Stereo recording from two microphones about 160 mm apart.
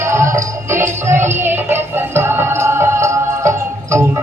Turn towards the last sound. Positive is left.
turn(degrees=-20)  # may be behind; listen again after turning